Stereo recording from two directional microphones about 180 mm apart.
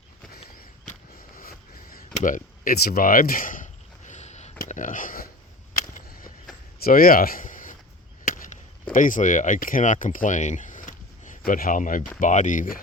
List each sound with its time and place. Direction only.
1.4 s a sound: 55° left (ahead or behind)
6.8 s speech: 55° left (ahead or behind)
8.3 s chop: 45° left (ahead or behind)
8.9 s speech: 45° left (ahead or behind)